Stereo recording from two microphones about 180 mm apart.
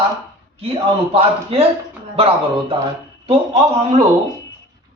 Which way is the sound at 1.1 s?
30° right (ahead or behind).